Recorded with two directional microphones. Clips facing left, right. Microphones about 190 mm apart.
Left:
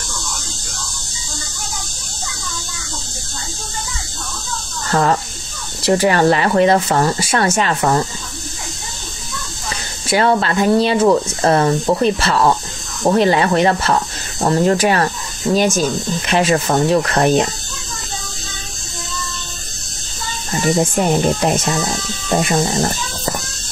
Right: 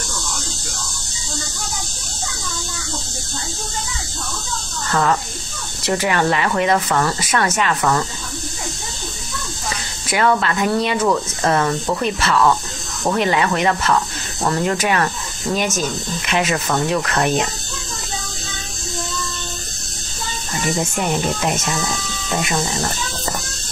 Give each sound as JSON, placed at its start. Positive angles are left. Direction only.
{"t": 4.9, "sound": "speech", "side_deg": 35}
{"t": 10.0, "sound": "speech", "side_deg": 30}
{"t": 20.6, "sound": "speech", "side_deg": 35}